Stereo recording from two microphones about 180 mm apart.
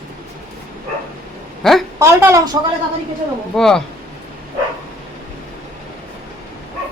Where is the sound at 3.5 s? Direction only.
5° left (ahead or behind).